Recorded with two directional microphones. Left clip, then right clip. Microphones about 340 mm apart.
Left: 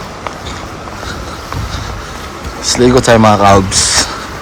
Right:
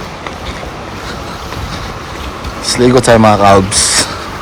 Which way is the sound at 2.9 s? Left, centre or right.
Centre.